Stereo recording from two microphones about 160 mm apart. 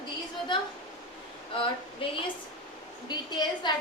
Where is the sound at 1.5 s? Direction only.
35° left (ahead or behind).